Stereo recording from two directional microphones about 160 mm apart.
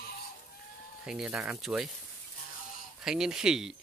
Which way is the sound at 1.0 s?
5° right (ahead or behind).